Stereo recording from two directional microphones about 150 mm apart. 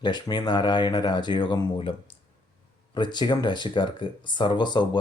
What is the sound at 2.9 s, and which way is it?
Speech, 30° left (ahead or behind).